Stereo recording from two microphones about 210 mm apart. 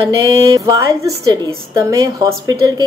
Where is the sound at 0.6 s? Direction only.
15° right (ahead or behind).